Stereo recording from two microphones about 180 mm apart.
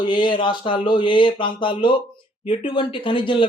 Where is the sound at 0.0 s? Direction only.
25° left (ahead or behind).